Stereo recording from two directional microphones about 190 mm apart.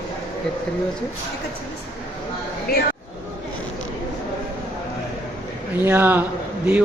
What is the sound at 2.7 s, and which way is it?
Speech, 55° left (ahead or behind).